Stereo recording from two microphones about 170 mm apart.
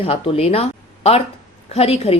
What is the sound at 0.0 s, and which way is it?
Speech, 35° left (ahead or behind).